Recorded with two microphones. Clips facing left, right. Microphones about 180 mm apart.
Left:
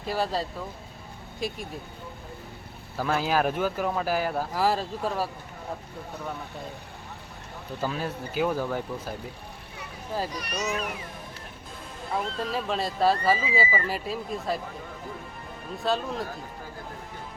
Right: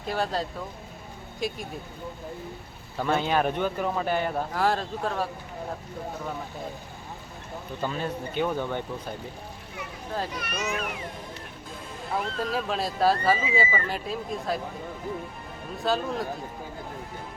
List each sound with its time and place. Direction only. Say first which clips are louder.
0.0 s speech: even; centre (ahead or behind)
3.0 s speech: even; 5° left (ahead or behind)
7.8 s speech: even; 5° left (ahead or behind)
10.3 s speech: left 1 dB; 35° left (ahead or behind)
12.1 s speech: right 1 dB; centre (ahead or behind)
15.8 s speech: right 1 dB; centre (ahead or behind)